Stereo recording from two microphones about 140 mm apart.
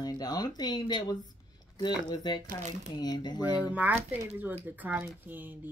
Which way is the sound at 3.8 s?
10° right (ahead or behind).